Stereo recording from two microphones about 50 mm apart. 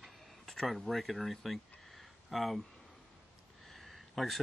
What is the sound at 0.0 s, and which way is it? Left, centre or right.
Speech, centre.